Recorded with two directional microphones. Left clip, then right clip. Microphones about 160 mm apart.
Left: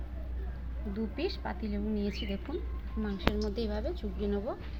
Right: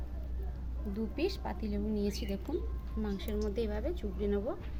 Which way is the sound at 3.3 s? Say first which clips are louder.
Even; 20° right (ahead or behind).